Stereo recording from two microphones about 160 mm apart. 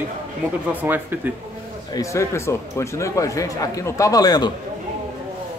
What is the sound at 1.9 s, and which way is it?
Speech, 20° left (ahead or behind).